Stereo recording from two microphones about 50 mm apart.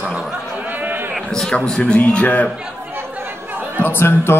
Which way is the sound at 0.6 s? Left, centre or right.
Right.